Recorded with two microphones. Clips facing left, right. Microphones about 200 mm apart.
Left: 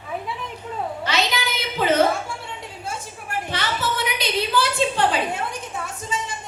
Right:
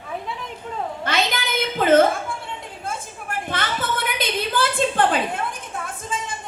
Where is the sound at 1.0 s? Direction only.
50° right (ahead or behind).